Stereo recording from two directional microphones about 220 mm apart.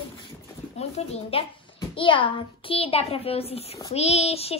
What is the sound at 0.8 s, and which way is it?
A child's voice, 25° left (ahead or behind).